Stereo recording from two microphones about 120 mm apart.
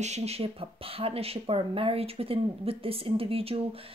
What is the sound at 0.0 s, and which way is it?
A woman's voice, 65° right (ahead or behind).